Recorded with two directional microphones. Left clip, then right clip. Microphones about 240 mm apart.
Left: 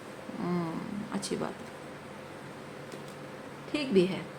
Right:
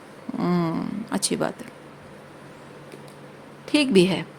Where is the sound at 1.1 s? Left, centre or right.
Right.